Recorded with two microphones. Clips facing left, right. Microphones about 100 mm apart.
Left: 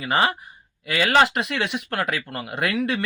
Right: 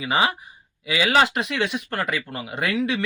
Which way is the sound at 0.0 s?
Centre (ahead or behind).